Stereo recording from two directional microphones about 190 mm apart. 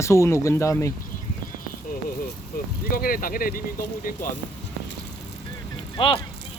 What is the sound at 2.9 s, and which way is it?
Speech, 50° left (ahead or behind).